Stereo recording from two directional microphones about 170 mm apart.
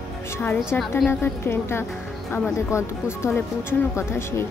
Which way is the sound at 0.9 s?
10° left (ahead or behind).